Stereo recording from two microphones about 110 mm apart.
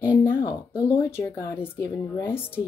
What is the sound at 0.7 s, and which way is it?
A woman's voice, 25° left (ahead or behind).